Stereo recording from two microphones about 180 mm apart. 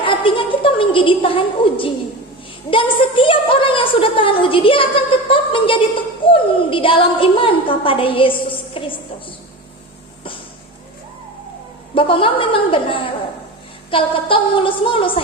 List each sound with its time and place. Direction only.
0.0 s a sound: 30° left (ahead or behind)
2.6 s a woman's voice: 30° left (ahead or behind)
11.9 s a woman's voice: 30° left (ahead or behind)